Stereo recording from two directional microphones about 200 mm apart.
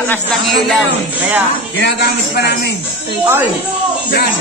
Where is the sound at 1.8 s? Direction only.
60° left (ahead or behind).